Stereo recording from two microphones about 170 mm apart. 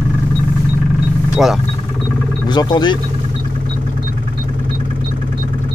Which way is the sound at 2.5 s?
25° left (ahead or behind).